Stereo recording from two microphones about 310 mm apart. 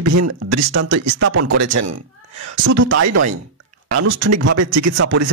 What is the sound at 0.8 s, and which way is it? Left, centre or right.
Speech, right.